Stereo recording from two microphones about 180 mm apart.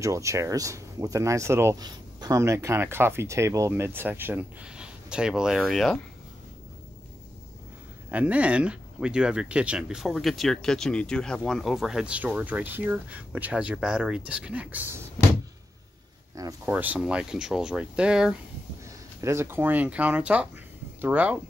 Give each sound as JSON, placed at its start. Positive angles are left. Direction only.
{"t": 0.0, "sound": "speech", "side_deg": -15}
{"t": 8.1, "sound": "speech", "side_deg": -10}
{"t": 16.3, "sound": "speech", "side_deg": -20}
{"t": 16.7, "sound": "speech", "side_deg": -10}